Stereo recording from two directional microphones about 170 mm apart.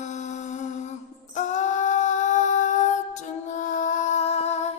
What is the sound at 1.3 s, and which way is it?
Female singing, 45° left (ahead or behind).